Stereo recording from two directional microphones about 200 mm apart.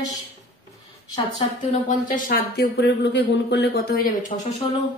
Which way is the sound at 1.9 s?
40° left (ahead or behind).